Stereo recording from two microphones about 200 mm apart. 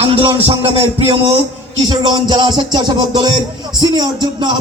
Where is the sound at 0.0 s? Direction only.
30° right (ahead or behind).